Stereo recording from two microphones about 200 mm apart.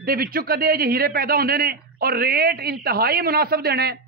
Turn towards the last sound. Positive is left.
turn(degrees=-50)  # may be behind; listen again after turning